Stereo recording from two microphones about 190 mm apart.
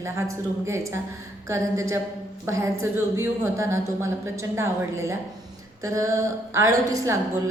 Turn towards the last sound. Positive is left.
turn(degrees=-15)  # may be behind; listen again after turning